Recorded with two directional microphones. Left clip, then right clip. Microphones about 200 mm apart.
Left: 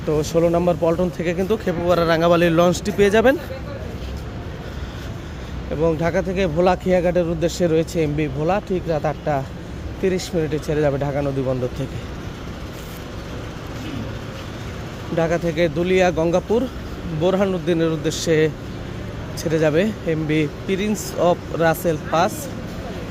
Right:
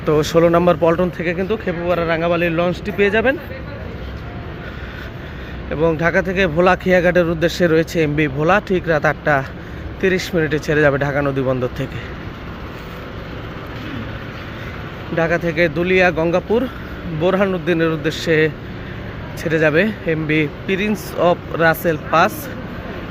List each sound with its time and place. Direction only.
0.1 s speech: centre (ahead or behind)
1.2 s speech: 15° left (ahead or behind)
5.8 s speech: 10° left (ahead or behind)
15.1 s speech: 15° left (ahead or behind)